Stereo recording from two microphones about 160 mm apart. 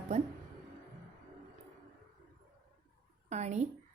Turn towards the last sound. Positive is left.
turn(degrees=-45)  # may be behind; listen again after turning